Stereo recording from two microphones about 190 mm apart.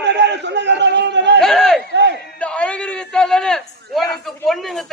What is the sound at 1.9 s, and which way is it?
Battle cry, 65° right (ahead or behind).